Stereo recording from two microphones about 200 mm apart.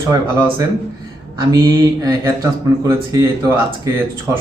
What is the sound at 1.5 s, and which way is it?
Speech, 15° right (ahead or behind).